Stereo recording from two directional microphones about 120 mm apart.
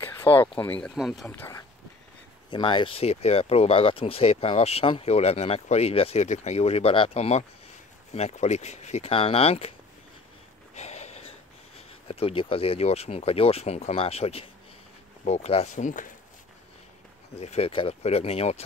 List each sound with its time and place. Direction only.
0.0 s speech: 20° left (ahead or behind)
0.9 s speech: centre (ahead or behind)
1.3 s speech: 20° left (ahead or behind)
2.5 s speech: 40° left (ahead or behind)
6.2 s speech: 75° left (ahead or behind); by 9.7 s 55° left (ahead or behind)
10.7 s speech: 65° left (ahead or behind)
15.2 s speech: 65° left (ahead or behind); by 16.1 s 90° left
17.4 s speech: 60° left (ahead or behind)